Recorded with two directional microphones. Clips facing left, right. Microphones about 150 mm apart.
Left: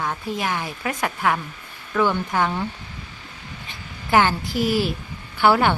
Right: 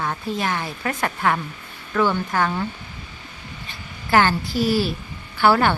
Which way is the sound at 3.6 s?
15° left (ahead or behind).